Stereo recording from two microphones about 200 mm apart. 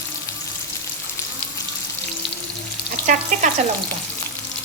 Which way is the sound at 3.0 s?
40° right (ahead or behind).